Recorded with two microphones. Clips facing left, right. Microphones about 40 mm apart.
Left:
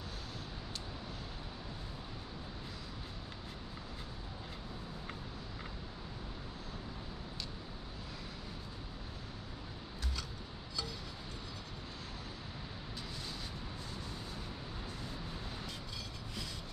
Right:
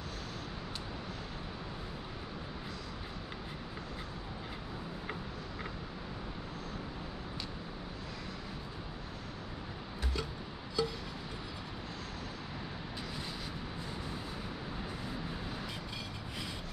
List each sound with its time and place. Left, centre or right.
10.8 s music: centre